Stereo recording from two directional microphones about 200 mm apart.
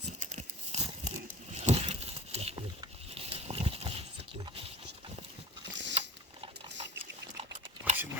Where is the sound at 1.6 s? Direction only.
30° right (ahead or behind).